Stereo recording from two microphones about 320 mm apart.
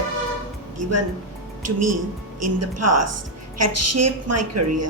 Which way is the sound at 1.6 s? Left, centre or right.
Right.